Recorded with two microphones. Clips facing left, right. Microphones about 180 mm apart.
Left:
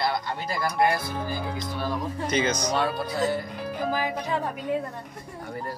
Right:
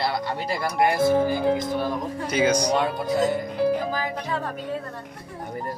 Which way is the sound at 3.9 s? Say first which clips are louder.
Left 1 dB; 15° left (ahead or behind).